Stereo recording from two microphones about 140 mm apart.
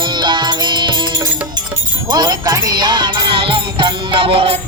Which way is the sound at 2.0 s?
30° right (ahead or behind).